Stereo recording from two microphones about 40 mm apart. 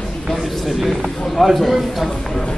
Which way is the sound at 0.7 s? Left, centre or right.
Centre.